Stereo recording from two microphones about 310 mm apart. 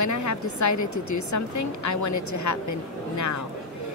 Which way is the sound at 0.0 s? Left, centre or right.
Left.